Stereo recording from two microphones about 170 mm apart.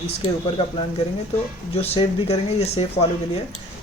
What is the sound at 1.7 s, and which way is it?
Speech, 35° left (ahead or behind).